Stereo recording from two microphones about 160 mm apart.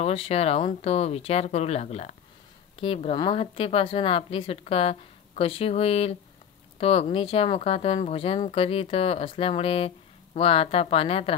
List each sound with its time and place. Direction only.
0.0 s speech: 40° left (ahead or behind)